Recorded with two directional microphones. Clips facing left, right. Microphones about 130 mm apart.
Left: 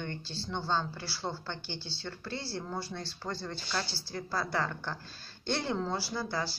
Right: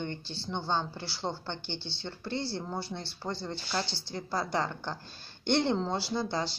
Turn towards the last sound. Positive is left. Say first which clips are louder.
# right 3 dB
turn(degrees=-25)  # may be behind; listen again after turning